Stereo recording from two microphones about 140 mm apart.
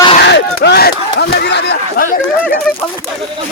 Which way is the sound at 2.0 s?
90° left.